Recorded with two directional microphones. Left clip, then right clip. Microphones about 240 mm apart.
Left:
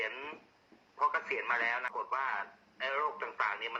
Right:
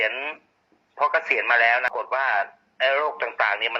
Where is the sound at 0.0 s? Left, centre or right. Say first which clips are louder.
Right 13 dB; right.